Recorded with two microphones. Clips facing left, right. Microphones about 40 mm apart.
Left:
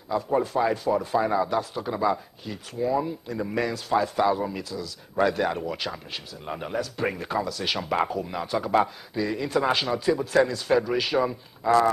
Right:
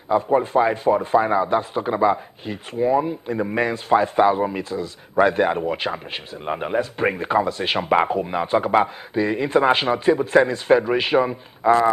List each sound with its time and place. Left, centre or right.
0.1 s speech: right